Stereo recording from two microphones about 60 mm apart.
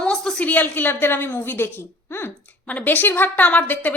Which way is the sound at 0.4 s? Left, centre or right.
Left.